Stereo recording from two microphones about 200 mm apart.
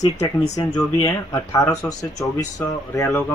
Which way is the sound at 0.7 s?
15° left (ahead or behind).